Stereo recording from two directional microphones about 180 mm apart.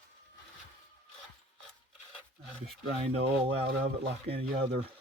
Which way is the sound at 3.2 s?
70° right (ahead or behind).